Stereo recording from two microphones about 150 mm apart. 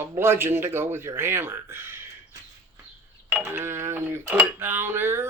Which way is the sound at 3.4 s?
15° right (ahead or behind).